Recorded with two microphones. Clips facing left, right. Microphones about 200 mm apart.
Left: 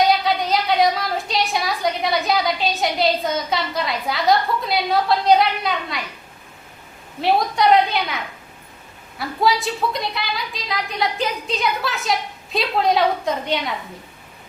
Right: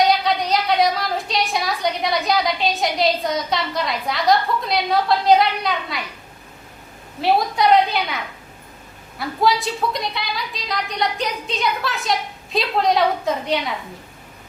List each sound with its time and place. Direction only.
0.0 s a woman's voice: centre (ahead or behind)
7.2 s a woman's voice: centre (ahead or behind)